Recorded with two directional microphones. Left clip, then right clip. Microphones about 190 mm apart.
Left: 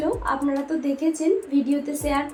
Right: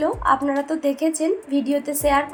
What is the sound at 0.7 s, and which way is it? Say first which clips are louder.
A woman's voice: right 3 dB; 50° right (ahead or behind).